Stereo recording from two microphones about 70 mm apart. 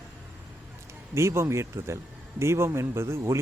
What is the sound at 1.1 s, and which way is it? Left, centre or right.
A man's voice, right.